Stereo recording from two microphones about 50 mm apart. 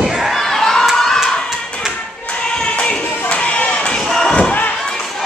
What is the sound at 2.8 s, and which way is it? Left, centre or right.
Music, left.